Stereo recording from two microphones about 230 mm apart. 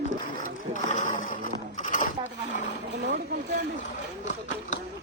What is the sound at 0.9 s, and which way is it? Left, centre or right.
Skateboard, left.